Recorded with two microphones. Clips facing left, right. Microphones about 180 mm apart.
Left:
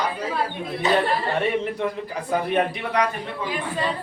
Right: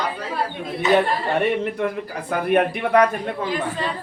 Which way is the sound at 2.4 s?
55° right (ahead or behind).